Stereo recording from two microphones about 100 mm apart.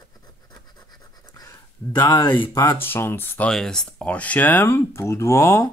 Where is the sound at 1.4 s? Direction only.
30° left (ahead or behind).